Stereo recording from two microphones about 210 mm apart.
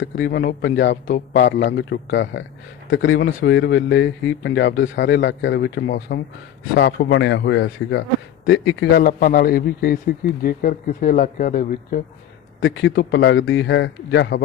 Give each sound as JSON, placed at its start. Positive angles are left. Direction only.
{"t": 0.0, "sound": "a man's voice", "side_deg": 55}
{"t": 6.7, "sound": "a man's voice", "side_deg": 55}
{"t": 12.5, "sound": "a man's voice", "side_deg": 60}